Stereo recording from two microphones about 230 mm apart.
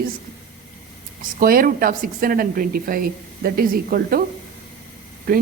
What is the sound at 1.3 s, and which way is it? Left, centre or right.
Speech, right.